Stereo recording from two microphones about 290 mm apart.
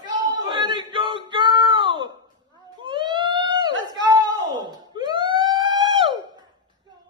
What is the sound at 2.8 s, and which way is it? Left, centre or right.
Police car, centre.